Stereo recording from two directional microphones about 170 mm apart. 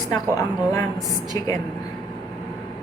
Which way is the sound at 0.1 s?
20° left (ahead or behind).